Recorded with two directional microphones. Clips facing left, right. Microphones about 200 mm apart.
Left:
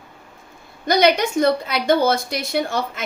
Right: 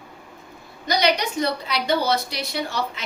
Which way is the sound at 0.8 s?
50° left (ahead or behind).